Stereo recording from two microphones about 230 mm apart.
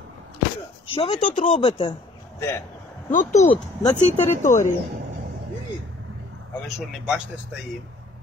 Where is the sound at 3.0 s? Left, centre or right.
Left.